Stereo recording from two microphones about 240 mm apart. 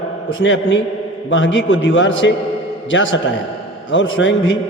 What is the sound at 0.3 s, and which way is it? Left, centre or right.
A man's voice, left.